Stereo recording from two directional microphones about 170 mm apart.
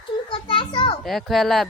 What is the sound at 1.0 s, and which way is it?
Speech, centre (ahead or behind).